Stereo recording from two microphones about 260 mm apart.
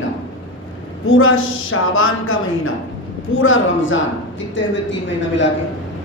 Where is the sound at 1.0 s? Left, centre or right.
Left.